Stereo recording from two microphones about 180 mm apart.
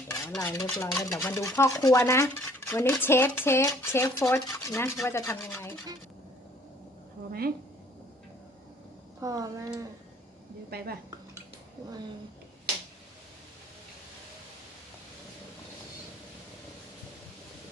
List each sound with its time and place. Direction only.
0.3 s stir: 15° left (ahead or behind)
7.3 s a sound: 55° right (ahead or behind)
9.2 s speech: 20° right (ahead or behind)
10.7 s a woman's voice: 60° right (ahead or behind)